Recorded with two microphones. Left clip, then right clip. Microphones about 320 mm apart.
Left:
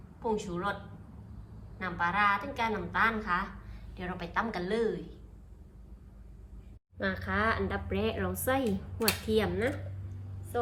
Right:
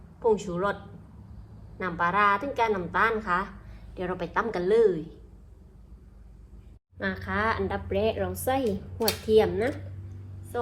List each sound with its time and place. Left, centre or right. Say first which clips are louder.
0.2 s a woman's voice: right 8 dB; centre
1.8 s a woman's voice: right 5 dB; centre
7.0 s a woman's voice: right 2 dB; centre
7.9 s a woman's voice: right 6 dB; centre